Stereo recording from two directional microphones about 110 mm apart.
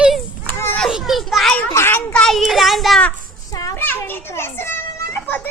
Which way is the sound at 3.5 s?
35° left (ahead or behind).